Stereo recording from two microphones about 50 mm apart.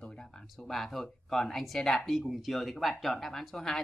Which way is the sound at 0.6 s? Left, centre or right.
Centre.